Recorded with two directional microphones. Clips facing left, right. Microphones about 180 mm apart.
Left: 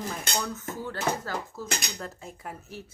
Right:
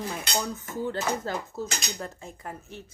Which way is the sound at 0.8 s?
20° right (ahead or behind).